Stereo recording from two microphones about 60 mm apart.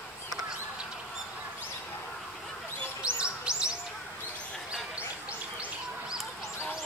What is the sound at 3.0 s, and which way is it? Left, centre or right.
Bird, centre.